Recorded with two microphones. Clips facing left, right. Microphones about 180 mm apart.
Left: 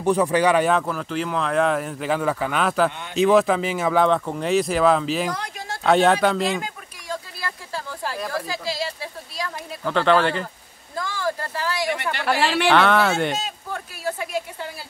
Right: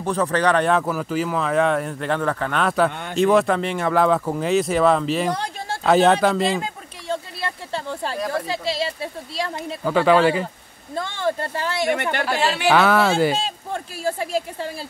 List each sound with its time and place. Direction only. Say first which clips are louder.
0.0 s speech: left 2 dB; 15° left (ahead or behind)
0.8 s speech: right 3 dB; 5° right (ahead or behind)
2.9 s speech: right 5 dB; 50° right (ahead or behind)
3.2 s speech: even; centre (ahead or behind)
5.3 s a sound: right 4 dB; 30° right (ahead or behind)
5.9 s speech: right 1 dB; centre (ahead or behind)
6.5 s a sound: right 2 dB; 25° right (ahead or behind)
8.3 s speech: right 3 dB; 25° right (ahead or behind)
9.8 s speech: right 2 dB; 5° right (ahead or behind)
11.0 s speech: right 3 dB; 25° right (ahead or behind)
11.9 s speech: right 4 dB; 50° right (ahead or behind)
12.6 s speech: right 2 dB; 5° right (ahead or behind)
13.4 s speech: right 3 dB; 30° right (ahead or behind)